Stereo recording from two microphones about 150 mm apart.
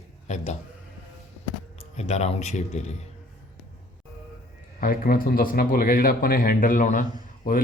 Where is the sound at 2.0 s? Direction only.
45° left (ahead or behind).